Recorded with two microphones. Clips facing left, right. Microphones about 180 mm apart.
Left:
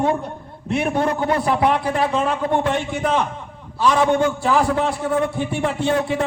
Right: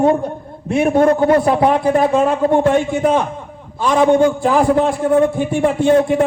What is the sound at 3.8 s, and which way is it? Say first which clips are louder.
Speech: right 3 dB; 50° right (ahead or behind).